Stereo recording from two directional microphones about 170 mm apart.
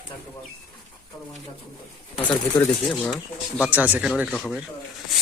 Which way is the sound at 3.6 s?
10° right (ahead or behind).